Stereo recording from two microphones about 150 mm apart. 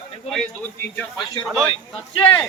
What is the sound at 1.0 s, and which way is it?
Speech, centre (ahead or behind).